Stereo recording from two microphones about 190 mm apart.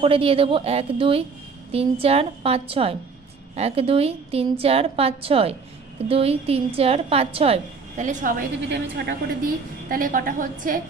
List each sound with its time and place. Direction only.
0.0 s a woman's voice: 30° right (ahead or behind); by 8.5 s 45° right (ahead or behind)
8.6 s a woman's voice: 60° right (ahead or behind)